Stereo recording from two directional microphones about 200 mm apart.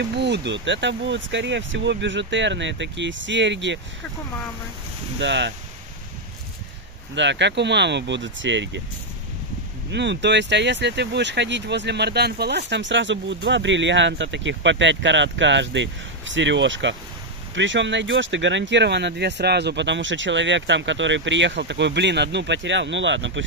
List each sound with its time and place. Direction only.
0.1 s speech: 60° right (ahead or behind)
5.2 s speech: 60° right (ahead or behind)
7.2 s speech: 60° right (ahead or behind)
9.9 s speech: 60° right (ahead or behind)